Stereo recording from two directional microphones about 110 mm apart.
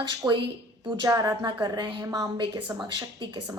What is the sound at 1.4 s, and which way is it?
Speech, 40° right (ahead or behind).